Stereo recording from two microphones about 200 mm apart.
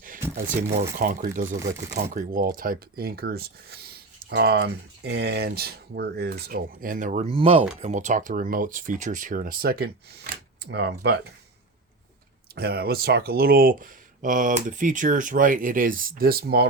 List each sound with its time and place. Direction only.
0.3 s speech: 40° right (ahead or behind); by 11.2 s 55° right (ahead or behind)
12.5 s speech: 50° right (ahead or behind)